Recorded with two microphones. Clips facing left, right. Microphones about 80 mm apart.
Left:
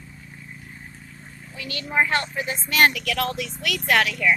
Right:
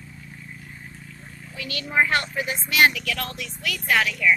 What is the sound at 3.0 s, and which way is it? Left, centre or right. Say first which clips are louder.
Speech: left 5 dB; left.